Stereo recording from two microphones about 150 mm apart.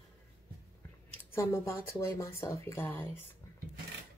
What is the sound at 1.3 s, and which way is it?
Speech, 15° left (ahead or behind).